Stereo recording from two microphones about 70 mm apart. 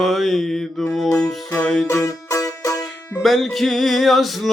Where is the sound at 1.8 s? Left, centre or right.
Left.